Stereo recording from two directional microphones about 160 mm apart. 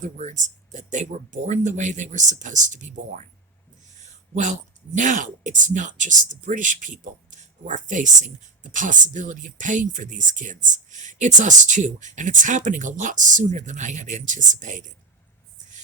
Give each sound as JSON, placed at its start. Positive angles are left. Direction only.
{"t": 0.0, "sound": "speech", "side_deg": -50}